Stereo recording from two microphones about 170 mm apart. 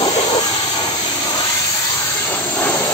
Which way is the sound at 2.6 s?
10° left (ahead or behind).